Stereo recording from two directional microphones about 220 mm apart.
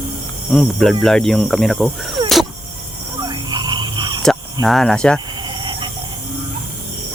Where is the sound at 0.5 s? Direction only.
Centre (ahead or behind).